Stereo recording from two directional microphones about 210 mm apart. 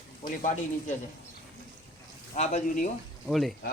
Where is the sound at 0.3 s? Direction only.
40° left (ahead or behind).